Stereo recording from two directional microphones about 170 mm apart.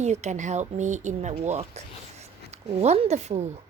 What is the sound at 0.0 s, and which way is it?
A woman's voice, 40° right (ahead or behind).